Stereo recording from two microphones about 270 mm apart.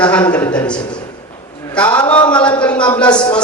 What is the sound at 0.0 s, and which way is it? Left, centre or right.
Speech, centre.